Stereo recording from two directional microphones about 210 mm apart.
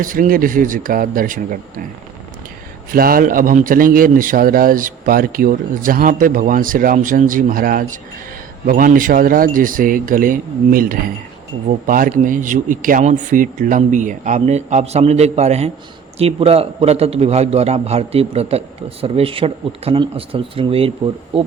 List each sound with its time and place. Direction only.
0.0 s a man's voice: 40° right (ahead or behind)
2.9 s a man's voice: 45° right (ahead or behind); by 20.9 s 25° right (ahead or behind)